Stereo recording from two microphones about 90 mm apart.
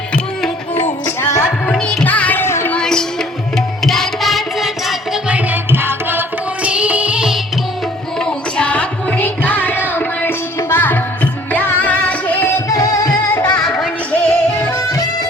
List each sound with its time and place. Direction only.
1.0 s music: 35° left (ahead or behind)
1.6 s music: 10° left (ahead or behind); by 2.7 s 25° left (ahead or behind)
2.7 s music: 5° left (ahead or behind)
5.3 s music: 20° right (ahead or behind)
8.2 s music: 10° left (ahead or behind)
12.6 s music: 40° left (ahead or behind)
13.7 s music: 5° left (ahead or behind)
14.3 s music: 25° left (ahead or behind)
14.8 s music: 40° left (ahead or behind)